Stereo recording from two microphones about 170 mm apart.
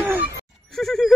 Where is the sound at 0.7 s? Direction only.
Centre (ahead or behind).